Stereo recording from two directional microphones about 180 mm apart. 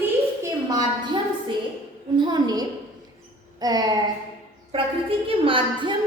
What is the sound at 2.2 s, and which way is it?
A woman's voice, 25° right (ahead or behind).